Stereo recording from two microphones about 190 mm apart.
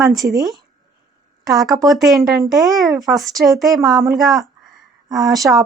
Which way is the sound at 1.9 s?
Centre (ahead or behind).